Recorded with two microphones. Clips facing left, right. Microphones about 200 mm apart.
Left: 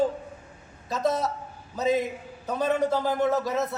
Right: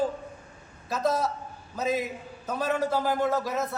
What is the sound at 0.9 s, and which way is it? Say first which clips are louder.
A man's voice: left 1 dB; centre (ahead or behind).